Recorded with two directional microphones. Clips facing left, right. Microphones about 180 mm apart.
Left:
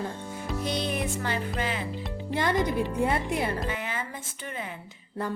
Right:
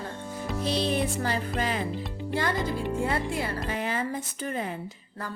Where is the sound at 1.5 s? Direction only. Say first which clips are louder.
Right 2 dB; 40° right (ahead or behind).